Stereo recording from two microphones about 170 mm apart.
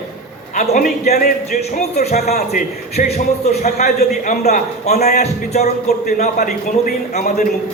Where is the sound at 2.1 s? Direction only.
65° left (ahead or behind).